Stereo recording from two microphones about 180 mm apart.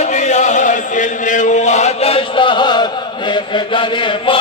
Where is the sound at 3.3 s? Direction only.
25° left (ahead or behind).